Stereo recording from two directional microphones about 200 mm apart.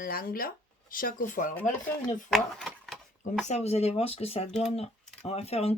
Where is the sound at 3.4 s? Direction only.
35° left (ahead or behind).